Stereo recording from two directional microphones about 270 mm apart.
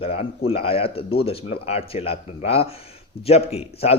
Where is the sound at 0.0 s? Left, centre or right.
Left.